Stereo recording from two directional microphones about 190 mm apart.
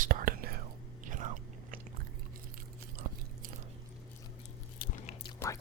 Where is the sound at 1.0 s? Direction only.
45° right (ahead or behind).